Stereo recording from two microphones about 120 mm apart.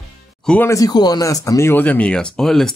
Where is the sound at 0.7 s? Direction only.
30° left (ahead or behind).